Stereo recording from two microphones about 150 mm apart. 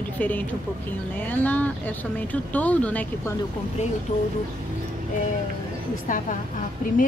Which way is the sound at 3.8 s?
50° left (ahead or behind).